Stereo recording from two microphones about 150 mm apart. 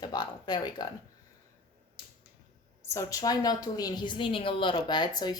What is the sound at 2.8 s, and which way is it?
A woman's voice, 20° left (ahead or behind).